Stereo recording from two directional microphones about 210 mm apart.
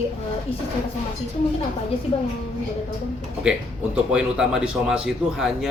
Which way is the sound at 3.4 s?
5° right (ahead or behind).